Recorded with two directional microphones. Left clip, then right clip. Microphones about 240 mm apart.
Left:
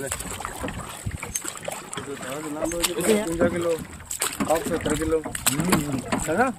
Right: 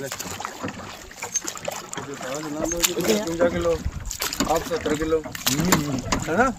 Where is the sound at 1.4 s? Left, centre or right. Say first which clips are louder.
Right 2 dB; right.